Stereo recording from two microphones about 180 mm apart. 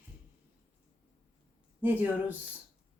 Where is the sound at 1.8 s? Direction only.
10° right (ahead or behind).